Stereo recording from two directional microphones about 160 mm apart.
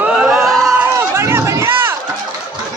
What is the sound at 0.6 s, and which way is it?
Crowd, 15° right (ahead or behind).